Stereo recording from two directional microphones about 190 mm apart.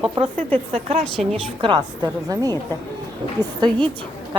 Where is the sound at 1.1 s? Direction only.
5° left (ahead or behind).